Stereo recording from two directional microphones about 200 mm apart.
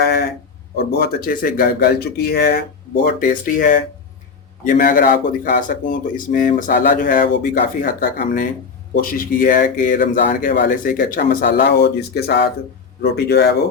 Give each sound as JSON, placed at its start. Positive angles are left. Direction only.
{"t": 0.0, "sound": "a sound", "side_deg": 50}
{"t": 0.9, "sound": "speech", "side_deg": 50}
{"t": 9.0, "sound": "speech", "side_deg": 45}